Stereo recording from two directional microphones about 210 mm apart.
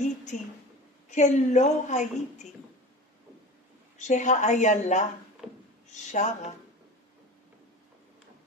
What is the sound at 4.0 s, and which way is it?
Speech, 35° left (ahead or behind).